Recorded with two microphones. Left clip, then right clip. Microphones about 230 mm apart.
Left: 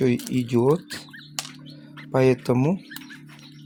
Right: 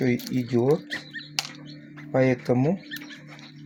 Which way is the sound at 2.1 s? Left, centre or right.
Left.